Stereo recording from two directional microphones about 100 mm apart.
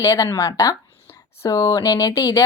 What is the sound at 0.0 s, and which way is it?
A woman's voice, 30° left (ahead or behind).